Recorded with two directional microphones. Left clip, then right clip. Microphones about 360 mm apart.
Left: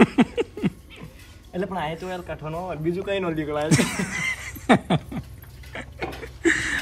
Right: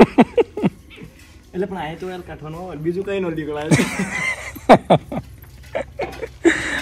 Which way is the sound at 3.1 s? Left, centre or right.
Centre.